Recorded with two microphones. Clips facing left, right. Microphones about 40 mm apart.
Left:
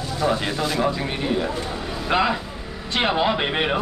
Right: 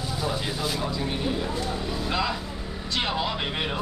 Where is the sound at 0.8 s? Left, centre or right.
Left.